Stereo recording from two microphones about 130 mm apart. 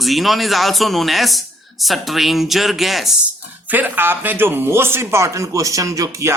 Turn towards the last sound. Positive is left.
turn(degrees=-25)  # may be behind; listen again after turning